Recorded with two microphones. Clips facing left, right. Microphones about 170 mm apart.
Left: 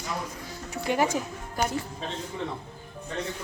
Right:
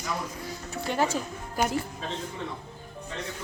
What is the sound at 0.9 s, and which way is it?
Speech, 10° left (ahead or behind).